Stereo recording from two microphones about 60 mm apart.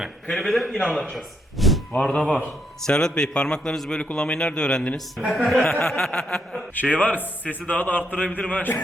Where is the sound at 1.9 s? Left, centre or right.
Left.